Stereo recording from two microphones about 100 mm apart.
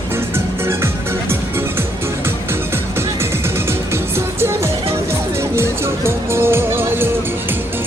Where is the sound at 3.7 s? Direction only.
25° right (ahead or behind).